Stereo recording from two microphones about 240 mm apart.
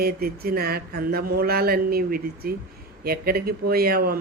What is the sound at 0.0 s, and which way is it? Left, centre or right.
Speech, right.